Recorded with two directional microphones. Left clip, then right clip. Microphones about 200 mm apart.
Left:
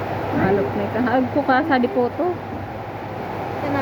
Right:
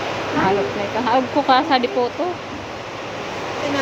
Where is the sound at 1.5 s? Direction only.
20° left (ahead or behind).